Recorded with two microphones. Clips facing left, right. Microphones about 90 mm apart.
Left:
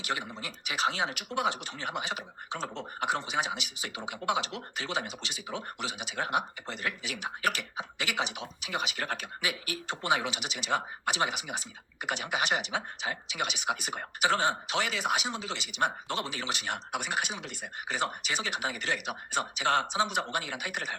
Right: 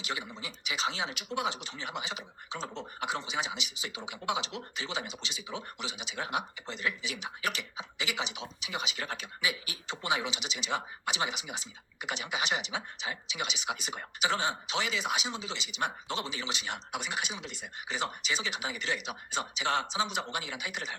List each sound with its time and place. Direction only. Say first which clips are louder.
0.0 s speech: left 3 dB; 50° left (ahead or behind)